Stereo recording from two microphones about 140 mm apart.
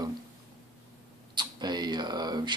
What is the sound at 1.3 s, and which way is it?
Speech, 30° right (ahead or behind).